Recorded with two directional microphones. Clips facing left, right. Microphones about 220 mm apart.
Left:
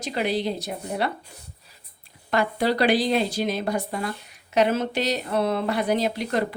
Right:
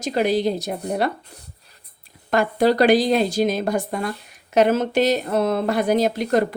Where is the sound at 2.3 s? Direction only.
45° right (ahead or behind).